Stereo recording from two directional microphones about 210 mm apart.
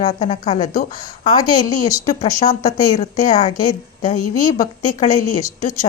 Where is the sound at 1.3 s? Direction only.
15° left (ahead or behind).